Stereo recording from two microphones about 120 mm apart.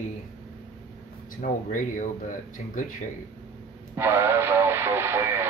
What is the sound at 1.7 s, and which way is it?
Speech, 90° left.